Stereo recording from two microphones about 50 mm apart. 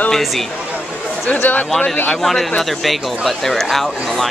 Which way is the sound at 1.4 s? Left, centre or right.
Left.